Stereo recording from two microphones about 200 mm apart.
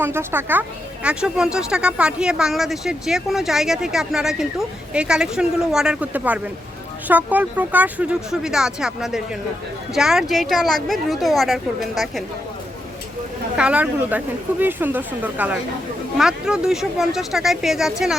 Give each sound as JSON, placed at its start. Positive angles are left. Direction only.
{"t": 0.0, "sound": "speech", "side_deg": -10}
{"t": 13.6, "sound": "speech", "side_deg": -5}